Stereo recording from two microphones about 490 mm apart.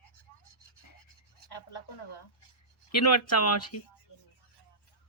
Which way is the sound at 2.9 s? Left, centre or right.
Left.